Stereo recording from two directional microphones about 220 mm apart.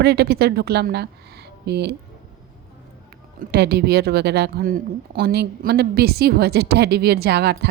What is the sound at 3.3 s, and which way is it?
Speech, 45° right (ahead or behind).